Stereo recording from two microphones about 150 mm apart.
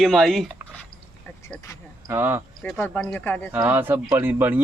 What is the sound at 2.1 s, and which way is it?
Speech, 15° right (ahead or behind).